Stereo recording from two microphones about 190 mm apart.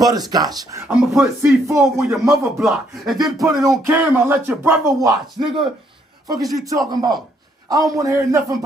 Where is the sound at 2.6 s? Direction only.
Centre (ahead or behind).